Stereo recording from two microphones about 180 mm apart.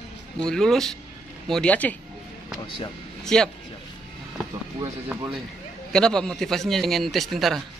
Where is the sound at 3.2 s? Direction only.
5° left (ahead or behind).